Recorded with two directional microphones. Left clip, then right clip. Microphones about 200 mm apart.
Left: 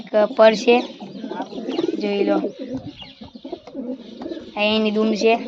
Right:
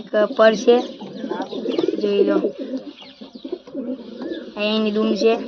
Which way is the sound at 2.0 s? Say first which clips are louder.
Right 3 dB; 35° left (ahead or behind).